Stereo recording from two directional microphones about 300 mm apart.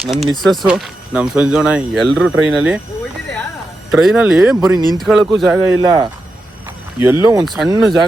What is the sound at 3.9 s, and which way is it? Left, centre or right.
Speech, centre.